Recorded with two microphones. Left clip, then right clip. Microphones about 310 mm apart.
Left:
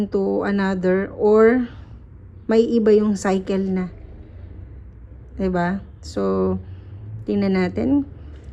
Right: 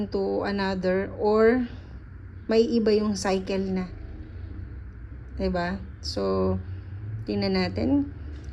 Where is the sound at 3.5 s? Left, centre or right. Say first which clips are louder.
Left 5 dB; left.